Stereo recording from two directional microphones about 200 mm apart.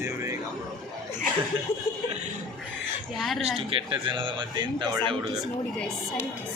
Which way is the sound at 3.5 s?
25° right (ahead or behind).